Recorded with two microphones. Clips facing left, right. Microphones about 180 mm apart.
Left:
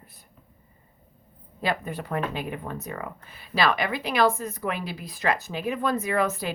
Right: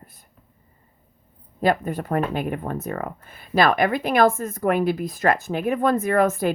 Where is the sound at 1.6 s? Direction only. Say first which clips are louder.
Right 7 dB; 45° right (ahead or behind).